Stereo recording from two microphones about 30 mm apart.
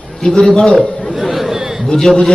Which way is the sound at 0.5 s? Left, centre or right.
Left.